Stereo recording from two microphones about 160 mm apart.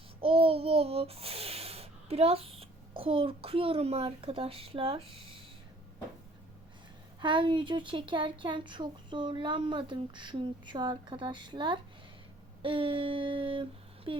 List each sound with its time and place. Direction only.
0.2 s a child's voice: 35° right (ahead or behind)
7.2 s speech: 30° right (ahead or behind)
12.6 s a sound: 35° right (ahead or behind)